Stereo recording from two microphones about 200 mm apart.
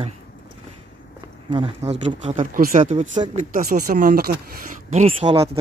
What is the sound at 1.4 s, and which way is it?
Speech, 25° right (ahead or behind).